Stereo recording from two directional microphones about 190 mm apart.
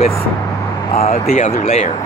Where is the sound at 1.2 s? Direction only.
45° left (ahead or behind).